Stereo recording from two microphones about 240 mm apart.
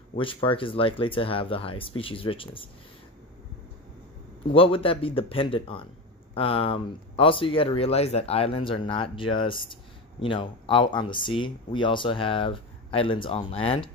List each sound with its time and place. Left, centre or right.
0.2 s speech: left
4.5 s speech: left